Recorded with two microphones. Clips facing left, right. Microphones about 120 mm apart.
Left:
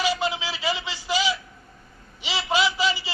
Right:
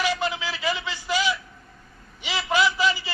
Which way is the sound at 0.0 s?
20° left (ahead or behind).